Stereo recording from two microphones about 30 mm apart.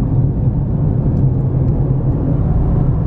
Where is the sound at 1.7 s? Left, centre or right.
Centre.